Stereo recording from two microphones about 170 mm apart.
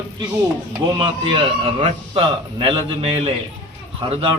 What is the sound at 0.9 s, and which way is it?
A man's voice, 30° right (ahead or behind).